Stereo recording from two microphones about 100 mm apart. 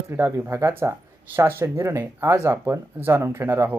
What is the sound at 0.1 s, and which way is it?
Speech, 25° right (ahead or behind).